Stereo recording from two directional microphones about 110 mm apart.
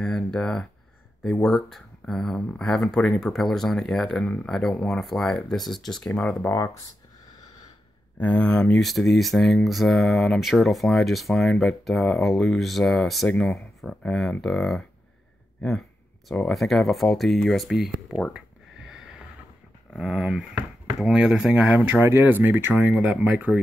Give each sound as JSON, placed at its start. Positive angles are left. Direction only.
{"t": 0.0, "sound": "speech", "side_deg": 5}
{"t": 6.5, "sound": "speech", "side_deg": 30}
{"t": 8.2, "sound": "speech", "side_deg": 10}
{"t": 16.3, "sound": "speech", "side_deg": 5}
{"t": 18.9, "sound": "a sound", "side_deg": -5}
{"t": 19.9, "sound": "speech", "side_deg": -5}
{"t": 21.8, "sound": "speech", "side_deg": -15}
{"t": 22.8, "sound": "speech", "side_deg": -5}